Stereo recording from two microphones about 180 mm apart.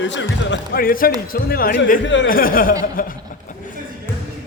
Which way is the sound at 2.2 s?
50° left (ahead or behind).